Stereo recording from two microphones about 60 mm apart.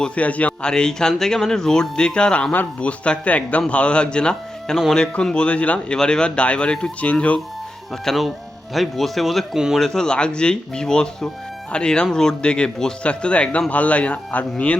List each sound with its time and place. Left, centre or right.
0.0 s a man's voice: left
0.7 s a man's voice: centre
8.0 s a man's voice: centre; by 14.4 s left